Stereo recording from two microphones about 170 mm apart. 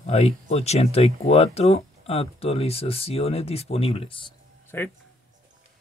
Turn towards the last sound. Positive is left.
turn(degrees=15)  # may be behind; listen again after turning